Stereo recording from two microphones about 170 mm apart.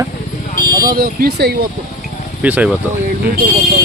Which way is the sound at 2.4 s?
10° right (ahead or behind).